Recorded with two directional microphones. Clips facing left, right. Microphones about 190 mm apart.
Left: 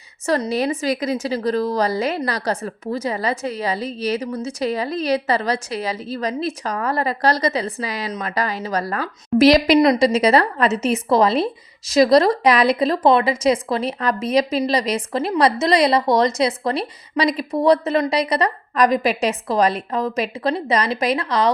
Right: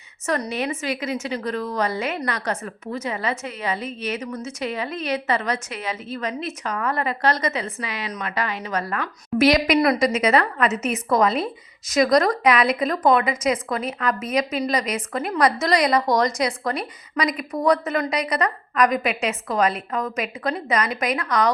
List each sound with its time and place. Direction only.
0.3 s a woman's voice: 35° left (ahead or behind)
9.8 s a woman's voice: 20° left (ahead or behind)
10.1 s a woman's voice: 35° left (ahead or behind)